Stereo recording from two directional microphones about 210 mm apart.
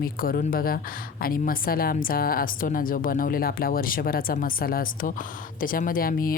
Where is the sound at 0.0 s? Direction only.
45° left (ahead or behind).